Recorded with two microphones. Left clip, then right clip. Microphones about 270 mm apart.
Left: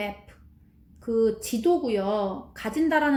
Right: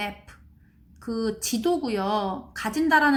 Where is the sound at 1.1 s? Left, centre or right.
Right.